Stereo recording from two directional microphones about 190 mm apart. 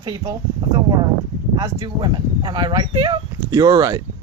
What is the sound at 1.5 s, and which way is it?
Speech, 20° right (ahead or behind).